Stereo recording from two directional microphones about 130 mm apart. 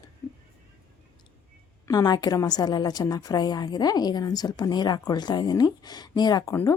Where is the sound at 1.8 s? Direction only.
30° left (ahead or behind).